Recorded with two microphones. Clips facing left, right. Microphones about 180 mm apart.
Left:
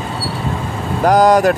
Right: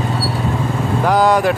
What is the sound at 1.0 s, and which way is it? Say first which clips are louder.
Speech: left 4 dB; 40° left (ahead or behind).